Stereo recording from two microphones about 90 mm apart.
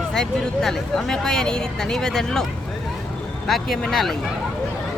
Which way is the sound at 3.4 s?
Centre (ahead or behind).